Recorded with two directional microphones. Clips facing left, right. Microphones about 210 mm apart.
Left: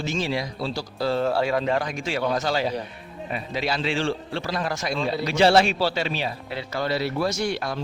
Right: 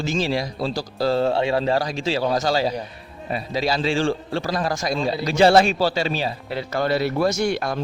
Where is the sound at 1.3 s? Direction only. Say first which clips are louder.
Right 2 dB; 25° right (ahead or behind).